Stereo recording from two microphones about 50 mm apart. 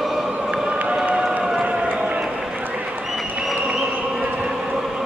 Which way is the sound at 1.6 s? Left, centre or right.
Right.